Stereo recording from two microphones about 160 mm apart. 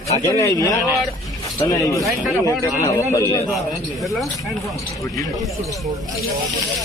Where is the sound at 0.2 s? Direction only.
20° left (ahead or behind).